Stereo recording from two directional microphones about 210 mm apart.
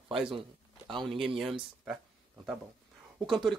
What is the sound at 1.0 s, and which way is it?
Speech, centre (ahead or behind).